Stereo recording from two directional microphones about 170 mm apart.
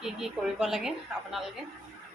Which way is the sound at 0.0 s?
5° right (ahead or behind).